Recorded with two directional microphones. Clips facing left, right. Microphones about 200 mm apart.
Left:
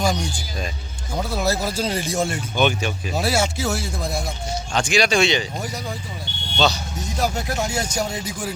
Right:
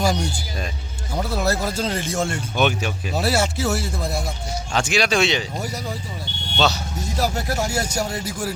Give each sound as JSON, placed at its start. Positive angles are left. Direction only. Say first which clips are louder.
{"t": 0.0, "sound": "speech", "louder": "right 1 dB", "side_deg": -5}
{"t": 8.1, "sound": "speech", "louder": "right 1 dB", "side_deg": 20}